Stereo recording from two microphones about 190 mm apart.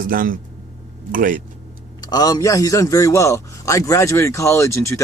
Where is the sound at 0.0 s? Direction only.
45° right (ahead or behind).